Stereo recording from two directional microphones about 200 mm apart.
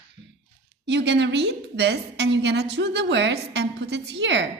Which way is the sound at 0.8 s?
60° right (ahead or behind).